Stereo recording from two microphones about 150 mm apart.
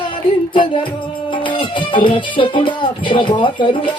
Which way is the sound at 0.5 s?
30° left (ahead or behind).